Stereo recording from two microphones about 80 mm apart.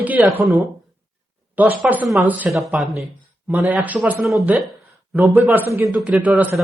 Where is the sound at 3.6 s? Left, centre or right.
Right.